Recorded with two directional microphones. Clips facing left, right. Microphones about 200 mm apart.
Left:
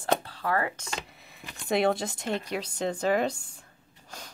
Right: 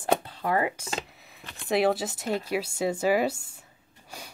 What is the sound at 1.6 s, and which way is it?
Speech, centre (ahead or behind).